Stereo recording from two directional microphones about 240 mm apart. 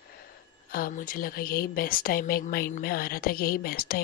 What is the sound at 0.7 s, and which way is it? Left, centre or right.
A woman's voice, left.